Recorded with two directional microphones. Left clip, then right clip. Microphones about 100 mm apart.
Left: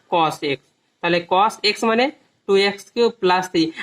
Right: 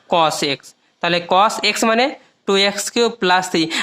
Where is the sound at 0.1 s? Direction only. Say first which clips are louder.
Right 3 dB; 90° right.